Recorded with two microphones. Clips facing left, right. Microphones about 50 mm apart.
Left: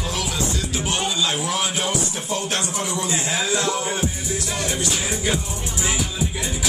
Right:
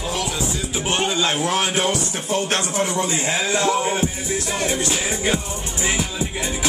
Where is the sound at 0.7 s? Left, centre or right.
Right.